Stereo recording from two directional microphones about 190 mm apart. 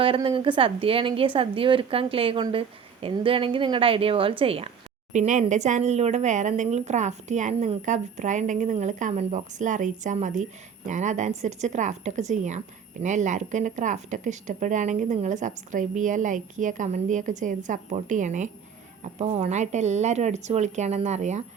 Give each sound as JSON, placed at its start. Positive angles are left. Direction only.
{"t": 0.0, "sound": "a woman's voice", "side_deg": -30}